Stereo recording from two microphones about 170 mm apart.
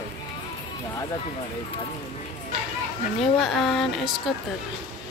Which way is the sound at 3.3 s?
Centre (ahead or behind).